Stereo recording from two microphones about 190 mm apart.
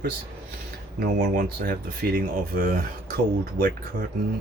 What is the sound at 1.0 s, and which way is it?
Speech, 60° right (ahead or behind).